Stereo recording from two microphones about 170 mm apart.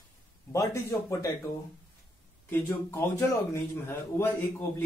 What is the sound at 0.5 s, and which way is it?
Speech, 20° left (ahead or behind).